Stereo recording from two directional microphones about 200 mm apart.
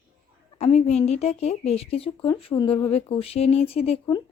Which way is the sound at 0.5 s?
35° left (ahead or behind).